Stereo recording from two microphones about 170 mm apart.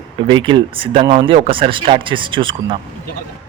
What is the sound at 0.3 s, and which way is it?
Speech, 30° right (ahead or behind).